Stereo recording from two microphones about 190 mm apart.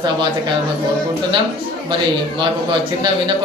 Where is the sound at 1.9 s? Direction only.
25° right (ahead or behind).